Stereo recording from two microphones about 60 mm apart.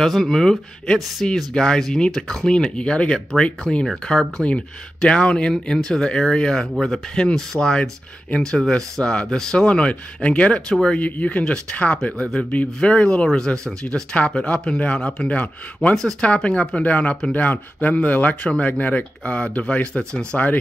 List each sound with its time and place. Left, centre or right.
0.0 s speech: centre; by 16.0 s left
16.0 s speech: centre
16.3 s speech: centre